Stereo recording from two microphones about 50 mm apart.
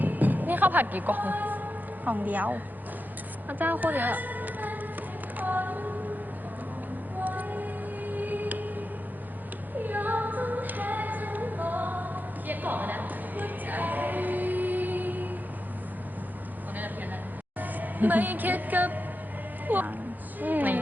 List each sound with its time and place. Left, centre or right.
0.0 s music: right
3.5 s a sound: right
7.2 s music: right
9.8 s female singing: right
17.6 s speech: right
19.6 s a sound: right